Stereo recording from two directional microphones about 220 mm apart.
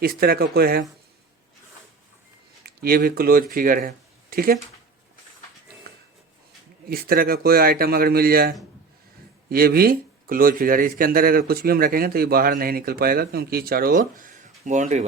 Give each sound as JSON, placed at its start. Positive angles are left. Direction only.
{"t": 0.0, "sound": "speech", "side_deg": -45}
{"t": 2.6, "sound": "speech", "side_deg": -45}
{"t": 6.8, "sound": "speech", "side_deg": -40}